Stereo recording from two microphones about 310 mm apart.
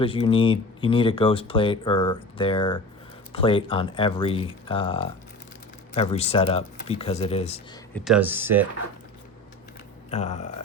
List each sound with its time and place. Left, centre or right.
0.0 s speech: centre
7.9 s speech: centre
10.1 s speech: left